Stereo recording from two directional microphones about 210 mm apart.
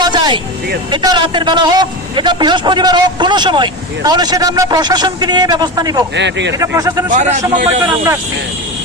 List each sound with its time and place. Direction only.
0.0 s vehicle: 20° right (ahead or behind)
0.9 s a man's voice: 20° right (ahead or behind)
6.1 s speech: 55° right (ahead or behind)
6.6 s speech: 15° right (ahead or behind)
7.1 s a man's voice: 35° right (ahead or behind)